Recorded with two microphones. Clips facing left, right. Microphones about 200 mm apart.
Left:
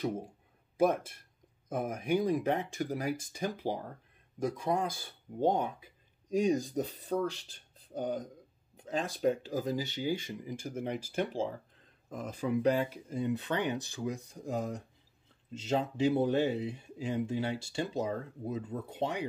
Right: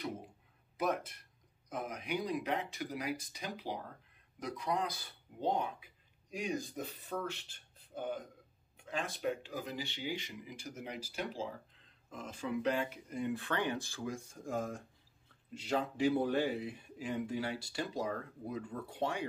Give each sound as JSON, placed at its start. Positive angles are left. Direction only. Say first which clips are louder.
{"t": 0.7, "sound": "speech", "louder": "left 7 dB", "side_deg": 50}
{"t": 12.1, "sound": "speech", "louder": "left 6 dB", "side_deg": 40}
{"t": 13.1, "sound": "speech", "louder": "left 4 dB", "side_deg": 25}